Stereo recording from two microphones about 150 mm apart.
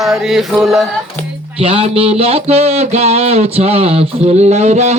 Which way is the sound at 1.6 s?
40° right (ahead or behind).